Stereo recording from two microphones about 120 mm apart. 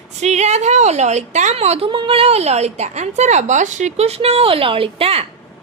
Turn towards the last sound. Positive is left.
turn(degrees=-50)  # may be behind; listen again after turning